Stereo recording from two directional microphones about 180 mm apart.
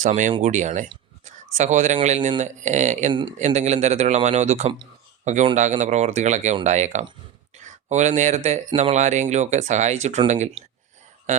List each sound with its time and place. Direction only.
0.0 s speech: 45° right (ahead or behind)
3.1 s a man's voice: 25° right (ahead or behind)
3.3 s a man's voice: 40° right (ahead or behind)